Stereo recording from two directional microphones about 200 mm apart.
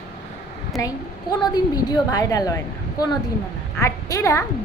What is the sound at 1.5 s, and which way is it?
A woman's voice, 20° left (ahead or behind).